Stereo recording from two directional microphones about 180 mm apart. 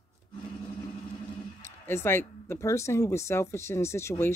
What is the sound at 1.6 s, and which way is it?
Speech, 15° left (ahead or behind).